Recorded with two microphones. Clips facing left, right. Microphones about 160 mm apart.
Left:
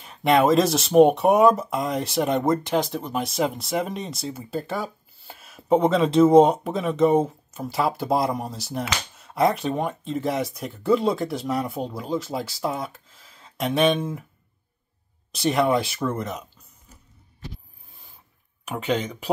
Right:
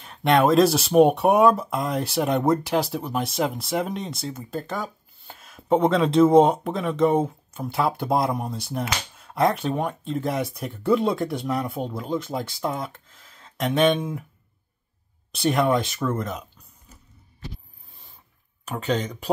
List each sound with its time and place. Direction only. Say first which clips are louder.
0.0 s speech: even; centre (ahead or behind)
15.3 s speech: even; centre (ahead or behind)
18.9 s speech: even; 10° left (ahead or behind)